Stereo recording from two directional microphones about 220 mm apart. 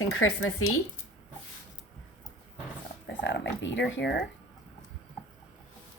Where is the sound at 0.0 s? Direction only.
70° left (ahead or behind).